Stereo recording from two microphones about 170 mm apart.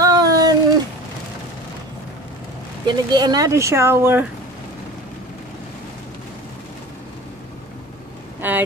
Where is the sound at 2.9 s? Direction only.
25° right (ahead or behind).